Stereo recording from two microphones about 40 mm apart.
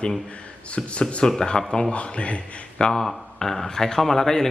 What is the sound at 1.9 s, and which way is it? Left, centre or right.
Speech, left.